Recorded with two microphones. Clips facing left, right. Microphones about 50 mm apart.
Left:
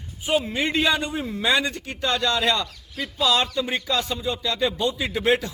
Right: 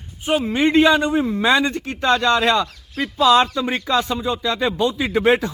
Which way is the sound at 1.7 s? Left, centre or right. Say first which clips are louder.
Right 7 dB; right.